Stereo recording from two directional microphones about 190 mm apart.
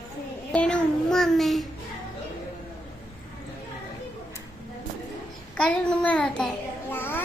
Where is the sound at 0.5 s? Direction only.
5° left (ahead or behind).